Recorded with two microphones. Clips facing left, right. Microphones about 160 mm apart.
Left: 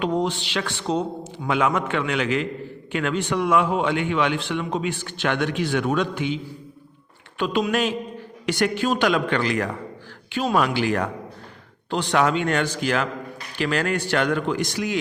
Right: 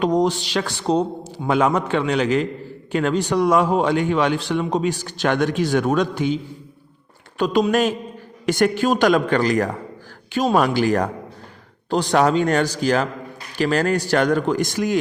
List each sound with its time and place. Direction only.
0.0 s a man's voice: 40° right (ahead or behind)